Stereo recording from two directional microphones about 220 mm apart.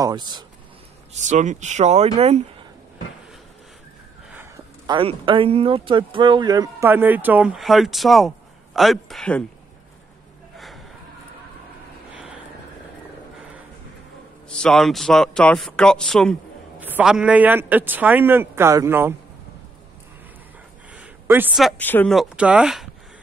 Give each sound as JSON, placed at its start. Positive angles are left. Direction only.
{"t": 0.0, "sound": "speech", "side_deg": -20}
{"t": 1.1, "sound": "speech", "side_deg": -35}
{"t": 4.8, "sound": "speech", "side_deg": -20}
{"t": 14.5, "sound": "a man's voice", "side_deg": 5}
{"t": 20.9, "sound": "speech", "side_deg": -5}